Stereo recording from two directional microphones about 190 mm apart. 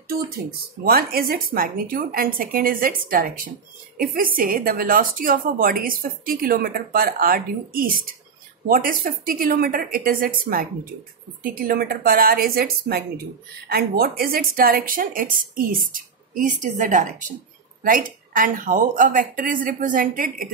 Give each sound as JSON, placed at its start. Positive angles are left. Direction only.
{"t": 0.8, "sound": "a woman's voice", "side_deg": -50}